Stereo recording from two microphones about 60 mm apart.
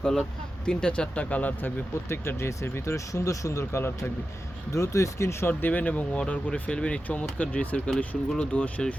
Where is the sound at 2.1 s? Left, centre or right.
Left.